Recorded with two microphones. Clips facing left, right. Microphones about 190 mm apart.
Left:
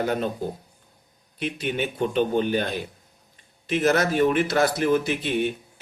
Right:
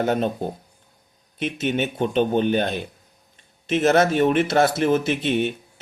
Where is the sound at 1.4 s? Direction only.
25° right (ahead or behind).